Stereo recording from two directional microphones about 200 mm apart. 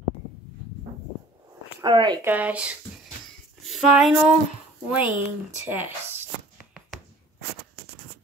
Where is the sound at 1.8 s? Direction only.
20° right (ahead or behind).